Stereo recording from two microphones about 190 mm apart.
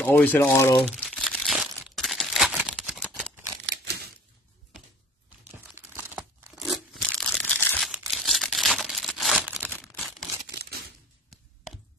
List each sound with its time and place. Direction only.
0.0 s speech: 10° left (ahead or behind)
0.8 s crumpling: 5° left (ahead or behind)
3.7 s typewriter: 55° right (ahead or behind)
5.9 s crumpling: 15° right (ahead or behind)
6.5 s tearing: centre (ahead or behind)
9.8 s single-lens reflex camera: centre (ahead or behind)
10.5 s a sound: 55° right (ahead or behind)